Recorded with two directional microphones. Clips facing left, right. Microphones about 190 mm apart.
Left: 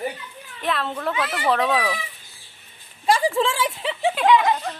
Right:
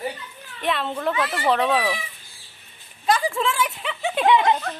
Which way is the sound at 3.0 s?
30° left (ahead or behind).